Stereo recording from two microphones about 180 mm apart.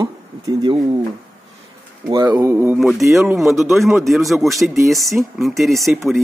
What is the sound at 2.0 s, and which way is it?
Speech, 20° right (ahead or behind).